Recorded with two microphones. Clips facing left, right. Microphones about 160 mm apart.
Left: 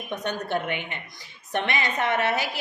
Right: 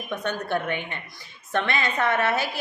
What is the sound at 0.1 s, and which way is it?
A woman's voice, 20° left (ahead or behind).